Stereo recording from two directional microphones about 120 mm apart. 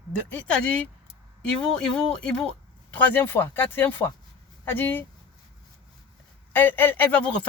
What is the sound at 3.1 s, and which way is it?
Speech, 15° left (ahead or behind).